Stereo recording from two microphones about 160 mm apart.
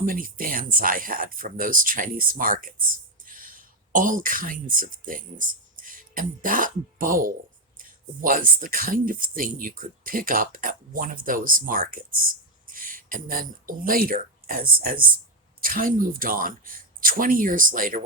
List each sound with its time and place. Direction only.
0.0 s speech: 60° right (ahead or behind)